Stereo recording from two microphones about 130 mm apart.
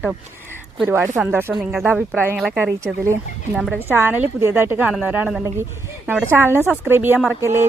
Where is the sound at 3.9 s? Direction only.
15° right (ahead or behind).